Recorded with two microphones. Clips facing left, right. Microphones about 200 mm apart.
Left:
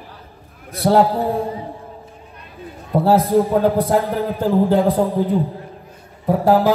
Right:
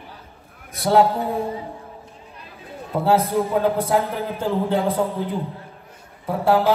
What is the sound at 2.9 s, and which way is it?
A man's voice, 35° left (ahead or behind).